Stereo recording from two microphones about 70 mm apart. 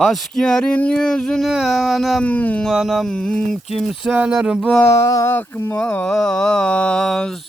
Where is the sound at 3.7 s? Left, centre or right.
Centre.